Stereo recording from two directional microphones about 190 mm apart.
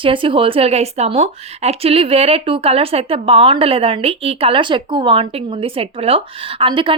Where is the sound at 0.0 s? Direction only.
25° right (ahead or behind).